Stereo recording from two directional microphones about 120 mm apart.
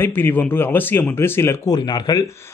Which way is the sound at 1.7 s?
35° left (ahead or behind).